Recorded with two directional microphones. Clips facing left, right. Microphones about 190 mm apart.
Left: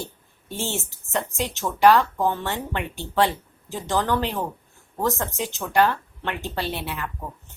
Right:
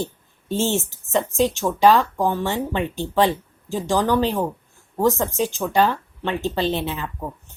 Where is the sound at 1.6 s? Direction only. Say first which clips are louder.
Left 1 dB; 15° right (ahead or behind).